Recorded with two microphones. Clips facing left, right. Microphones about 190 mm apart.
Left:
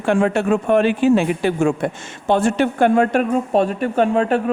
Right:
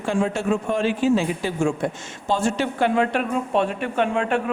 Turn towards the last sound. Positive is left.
turn(degrees=40)  # may be behind; listen again after turning